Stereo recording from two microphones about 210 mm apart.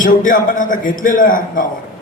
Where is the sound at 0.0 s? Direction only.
40° left (ahead or behind).